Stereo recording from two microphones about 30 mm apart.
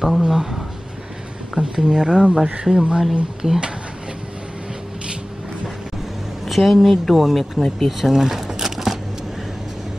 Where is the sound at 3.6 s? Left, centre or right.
Right.